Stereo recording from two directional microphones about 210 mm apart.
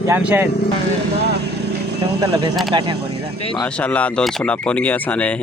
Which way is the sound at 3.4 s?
25° left (ahead or behind).